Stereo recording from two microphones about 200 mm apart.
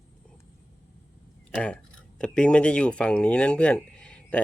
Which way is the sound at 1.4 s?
5° left (ahead or behind).